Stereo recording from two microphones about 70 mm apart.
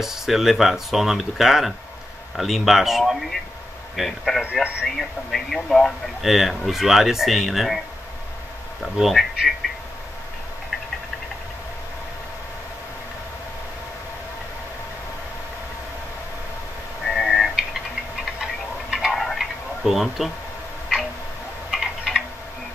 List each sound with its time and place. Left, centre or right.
0.0 s speech: centre
8.9 s speech: centre
17.0 s a sound: centre
21.6 s typing: centre